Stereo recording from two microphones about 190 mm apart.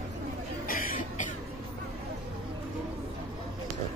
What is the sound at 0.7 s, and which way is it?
Cough, 50° left (ahead or behind).